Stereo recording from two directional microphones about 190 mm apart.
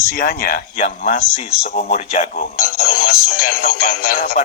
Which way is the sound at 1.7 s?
35° left (ahead or behind).